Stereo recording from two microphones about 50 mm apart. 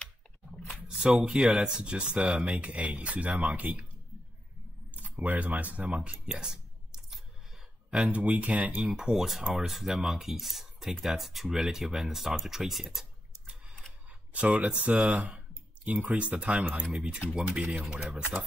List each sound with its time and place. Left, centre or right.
0.8 s a sound: centre
1.8 s speech: right
4.9 s speech: right; by 7.2 s centre
8.1 s speech: right
8.9 s speech: centre
14.3 s speech: right
18.1 s speech: right